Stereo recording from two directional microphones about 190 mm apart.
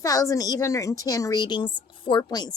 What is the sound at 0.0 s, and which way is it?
A woman's voice, 20° left (ahead or behind).